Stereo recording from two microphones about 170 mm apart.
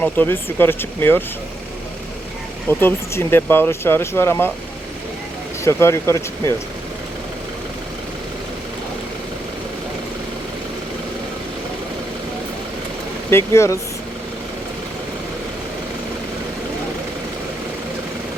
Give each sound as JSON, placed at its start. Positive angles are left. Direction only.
{"t": 0.0, "sound": "speech", "side_deg": 10}
{"t": 2.6, "sound": "speech", "side_deg": 15}
{"t": 5.6, "sound": "speech", "side_deg": 15}
{"t": 13.3, "sound": "speech", "side_deg": 15}